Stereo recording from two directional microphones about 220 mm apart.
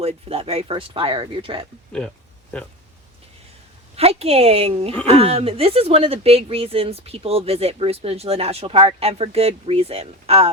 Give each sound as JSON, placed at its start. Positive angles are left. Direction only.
{"t": 0.0, "sound": "speech", "side_deg": -25}
{"t": 3.9, "sound": "speech", "side_deg": -25}